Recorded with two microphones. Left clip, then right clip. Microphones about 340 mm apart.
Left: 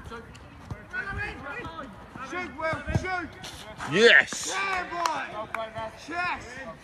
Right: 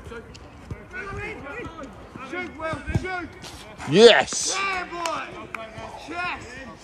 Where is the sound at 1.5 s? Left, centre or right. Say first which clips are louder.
Right 1 dB; centre.